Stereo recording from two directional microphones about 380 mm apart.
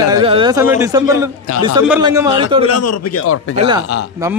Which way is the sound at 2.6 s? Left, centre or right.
Left.